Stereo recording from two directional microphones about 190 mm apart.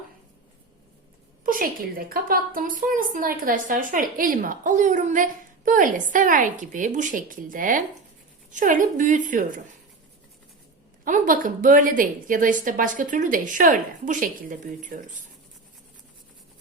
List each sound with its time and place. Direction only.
1.5 s a woman's voice: 50° right (ahead or behind)
11.0 s a woman's voice: 45° right (ahead or behind)